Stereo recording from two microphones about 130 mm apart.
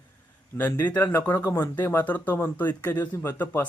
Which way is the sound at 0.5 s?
15° left (ahead or behind).